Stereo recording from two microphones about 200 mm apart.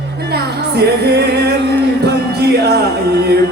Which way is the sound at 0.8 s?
55° right (ahead or behind).